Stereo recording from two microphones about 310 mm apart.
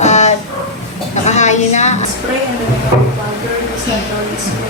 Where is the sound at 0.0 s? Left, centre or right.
Left.